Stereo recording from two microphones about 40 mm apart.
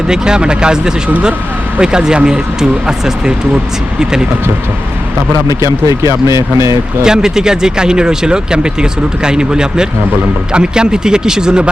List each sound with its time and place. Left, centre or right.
0.1 s speech: right
7.0 s speech: centre